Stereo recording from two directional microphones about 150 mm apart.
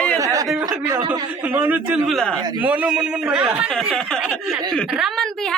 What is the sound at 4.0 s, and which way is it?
A woman's voice, 5° left (ahead or behind).